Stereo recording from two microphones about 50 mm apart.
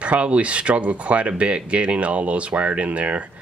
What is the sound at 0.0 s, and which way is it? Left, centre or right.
Speech, right.